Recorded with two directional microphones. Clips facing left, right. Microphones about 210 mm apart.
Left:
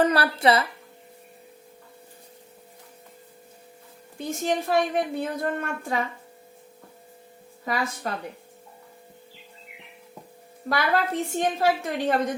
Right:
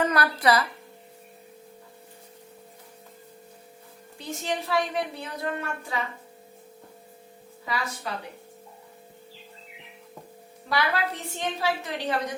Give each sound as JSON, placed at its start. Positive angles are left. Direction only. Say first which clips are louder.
{"t": 0.0, "sound": "speech", "louder": "left 3 dB", "side_deg": 30}
{"t": 4.2, "sound": "a woman's voice", "louder": "left 5 dB", "side_deg": 50}
{"t": 7.6, "sound": "a woman's voice", "louder": "left 4 dB", "side_deg": 45}
{"t": 10.7, "sound": "a woman's voice", "louder": "left 3 dB", "side_deg": 50}